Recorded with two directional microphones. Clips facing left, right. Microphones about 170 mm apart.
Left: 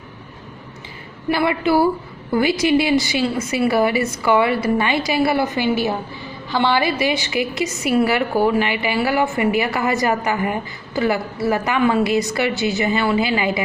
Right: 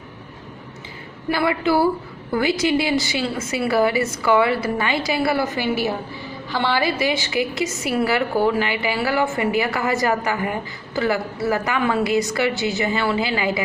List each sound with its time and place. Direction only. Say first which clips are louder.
1.3 s a woman's voice: left 2 dB; 20° left (ahead or behind)